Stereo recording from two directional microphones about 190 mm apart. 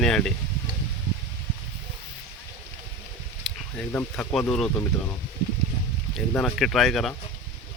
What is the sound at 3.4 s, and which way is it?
Speech, 10° left (ahead or behind).